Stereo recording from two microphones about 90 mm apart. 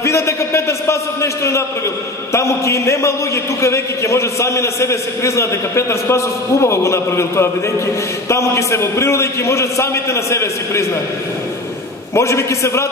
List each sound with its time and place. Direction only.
0.0 s a man's voice: 30° left (ahead or behind)
12.1 s a man's voice: 30° left (ahead or behind)